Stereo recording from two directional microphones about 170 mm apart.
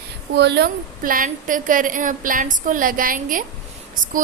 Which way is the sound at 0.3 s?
85° right.